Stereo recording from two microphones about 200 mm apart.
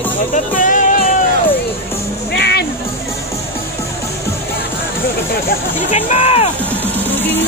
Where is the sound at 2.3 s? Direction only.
55° left (ahead or behind).